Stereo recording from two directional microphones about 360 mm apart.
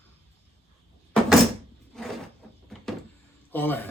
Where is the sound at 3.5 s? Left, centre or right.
Centre.